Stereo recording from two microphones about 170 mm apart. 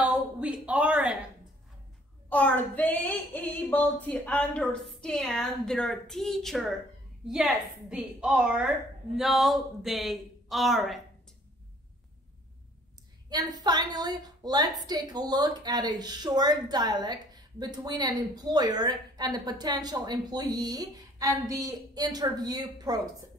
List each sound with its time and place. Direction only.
0.0 s a sound: 10° right (ahead or behind)
2.2 s female singing: 10° left (ahead or behind)
7.2 s a woman's voice: 5° right (ahead or behind)
13.3 s a woman's voice: 25° right (ahead or behind)